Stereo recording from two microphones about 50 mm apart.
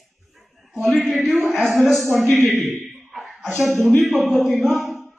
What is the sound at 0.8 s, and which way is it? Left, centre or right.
A man's voice, centre.